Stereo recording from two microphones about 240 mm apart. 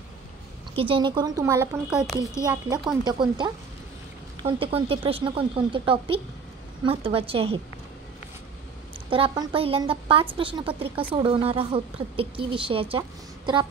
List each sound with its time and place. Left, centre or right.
0.7 s a woman's voice: right; by 2.2 s centre
2.4 s a woman's voice: centre
9.1 s speech: centre